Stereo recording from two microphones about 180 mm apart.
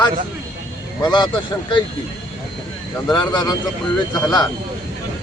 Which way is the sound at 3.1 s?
25° left (ahead or behind).